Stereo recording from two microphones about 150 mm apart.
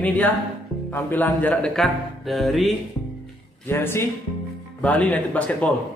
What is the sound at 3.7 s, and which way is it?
Speech, 15° left (ahead or behind).